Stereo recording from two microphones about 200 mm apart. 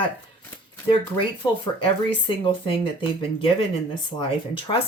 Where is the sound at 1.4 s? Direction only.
25° left (ahead or behind).